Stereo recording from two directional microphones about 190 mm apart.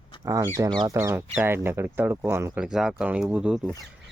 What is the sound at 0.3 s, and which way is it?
Speech, 15° right (ahead or behind).